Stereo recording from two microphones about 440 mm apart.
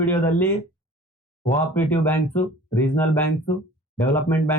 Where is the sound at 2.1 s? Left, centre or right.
Centre.